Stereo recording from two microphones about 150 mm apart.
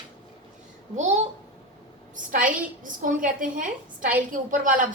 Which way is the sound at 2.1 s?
60° right (ahead or behind).